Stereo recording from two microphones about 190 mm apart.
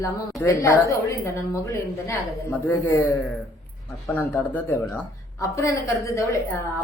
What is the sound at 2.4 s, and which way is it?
Speech, 10° left (ahead or behind).